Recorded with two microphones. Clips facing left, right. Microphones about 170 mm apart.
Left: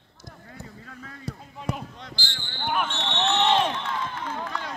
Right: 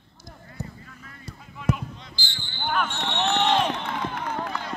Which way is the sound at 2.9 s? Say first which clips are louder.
Even; 50° right (ahead or behind).